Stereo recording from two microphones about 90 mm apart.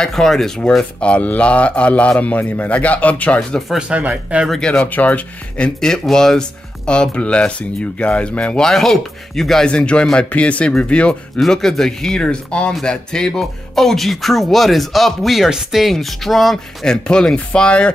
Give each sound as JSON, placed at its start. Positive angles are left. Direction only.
{"t": 0.0, "sound": "speech", "side_deg": 5}
{"t": 3.5, "sound": "speech", "side_deg": 0}
{"t": 3.9, "sound": "speech", "side_deg": -15}
{"t": 4.5, "sound": "speech", "side_deg": 10}